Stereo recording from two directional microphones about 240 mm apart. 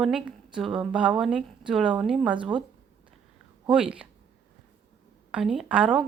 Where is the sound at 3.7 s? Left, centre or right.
Centre.